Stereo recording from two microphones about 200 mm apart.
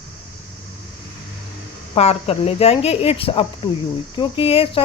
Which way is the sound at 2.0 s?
30° left (ahead or behind).